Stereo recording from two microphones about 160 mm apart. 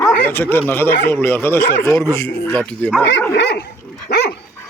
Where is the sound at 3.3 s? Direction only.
90° left.